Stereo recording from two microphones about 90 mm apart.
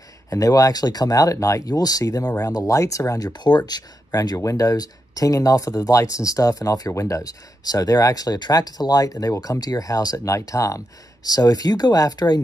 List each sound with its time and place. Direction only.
0.3 s speech: 40° left (ahead or behind)